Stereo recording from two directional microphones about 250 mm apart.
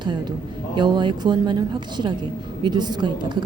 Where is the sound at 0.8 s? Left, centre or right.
Centre.